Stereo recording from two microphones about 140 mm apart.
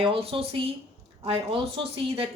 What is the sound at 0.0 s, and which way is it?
A woman's voice, 40° right (ahead or behind).